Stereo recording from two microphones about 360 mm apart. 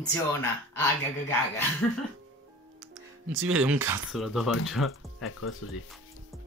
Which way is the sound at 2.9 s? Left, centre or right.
Right.